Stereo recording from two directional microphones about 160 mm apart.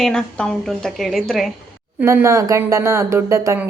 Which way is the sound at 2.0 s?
15° right (ahead or behind).